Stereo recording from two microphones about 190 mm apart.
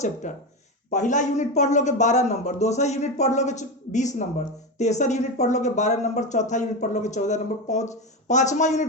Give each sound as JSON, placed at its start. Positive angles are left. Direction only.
{"t": 0.0, "sound": "a man's voice", "side_deg": 40}